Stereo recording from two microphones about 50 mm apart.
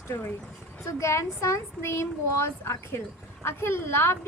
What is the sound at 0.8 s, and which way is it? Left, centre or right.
A child's voice, left.